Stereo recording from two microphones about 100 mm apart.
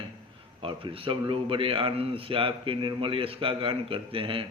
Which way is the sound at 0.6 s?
65° right (ahead or behind).